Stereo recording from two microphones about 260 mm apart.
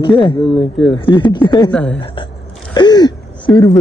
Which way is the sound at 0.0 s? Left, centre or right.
Centre.